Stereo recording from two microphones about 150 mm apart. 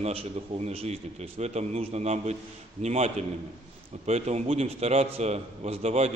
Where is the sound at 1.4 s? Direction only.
50° right (ahead or behind).